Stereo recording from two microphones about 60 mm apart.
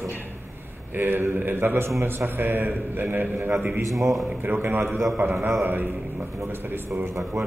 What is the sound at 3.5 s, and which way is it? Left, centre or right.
Speech, centre.